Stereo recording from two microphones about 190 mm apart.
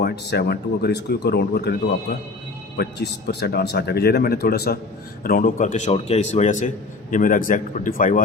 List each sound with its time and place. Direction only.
0.0 s speech: 55° left (ahead or behind)
2.7 s a man's voice: 55° left (ahead or behind)